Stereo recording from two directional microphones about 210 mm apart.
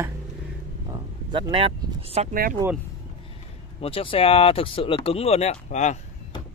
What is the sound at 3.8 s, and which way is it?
Speech, 25° left (ahead or behind).